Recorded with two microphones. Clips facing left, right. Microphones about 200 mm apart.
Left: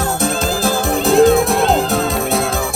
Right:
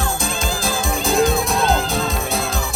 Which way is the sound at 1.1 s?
65° left (ahead or behind).